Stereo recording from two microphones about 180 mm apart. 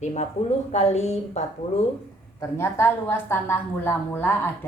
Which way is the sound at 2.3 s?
15° left (ahead or behind).